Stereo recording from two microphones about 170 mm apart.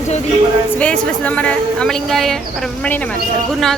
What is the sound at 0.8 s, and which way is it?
A woman's voice, 10° left (ahead or behind).